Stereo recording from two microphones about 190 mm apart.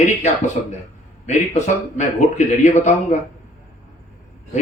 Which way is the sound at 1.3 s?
35° left (ahead or behind).